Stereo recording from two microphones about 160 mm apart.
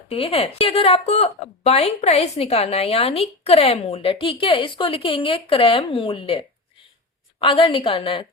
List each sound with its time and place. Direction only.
0.1 s a woman's voice: 40° left (ahead or behind)
7.4 s a woman's voice: 35° left (ahead or behind)